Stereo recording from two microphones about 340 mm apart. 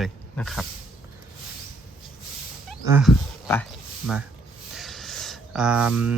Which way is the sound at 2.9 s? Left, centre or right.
Centre.